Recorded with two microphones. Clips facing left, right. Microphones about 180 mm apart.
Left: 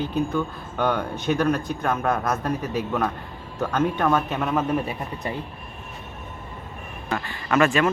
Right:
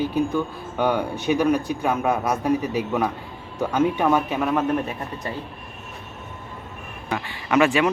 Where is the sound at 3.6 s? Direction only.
10° right (ahead or behind).